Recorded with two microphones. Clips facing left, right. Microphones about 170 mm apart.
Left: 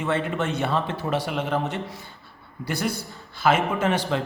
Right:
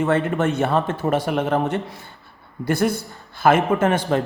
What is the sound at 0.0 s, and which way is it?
Speech, 50° right (ahead or behind).